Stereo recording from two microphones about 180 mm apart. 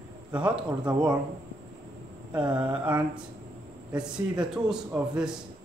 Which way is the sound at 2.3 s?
25° right (ahead or behind).